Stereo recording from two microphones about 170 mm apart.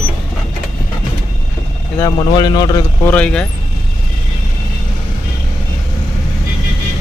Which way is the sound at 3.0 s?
5° left (ahead or behind).